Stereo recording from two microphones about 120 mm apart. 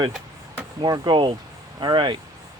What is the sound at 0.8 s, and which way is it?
Speech, 35° right (ahead or behind).